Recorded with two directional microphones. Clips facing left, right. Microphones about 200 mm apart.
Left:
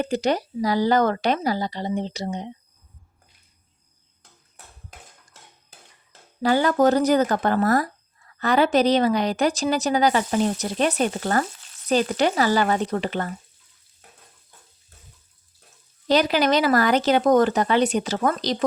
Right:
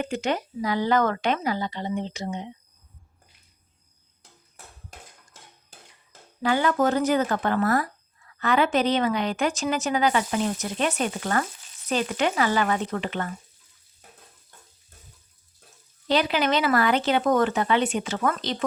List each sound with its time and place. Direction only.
0.0 s speech: 35° left (ahead or behind)
6.4 s speech: 35° left (ahead or behind)
16.0 s speech: 40° left (ahead or behind)